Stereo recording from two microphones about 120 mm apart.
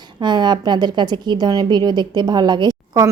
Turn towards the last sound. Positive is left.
turn(degrees=-35)  # may be behind; listen again after turning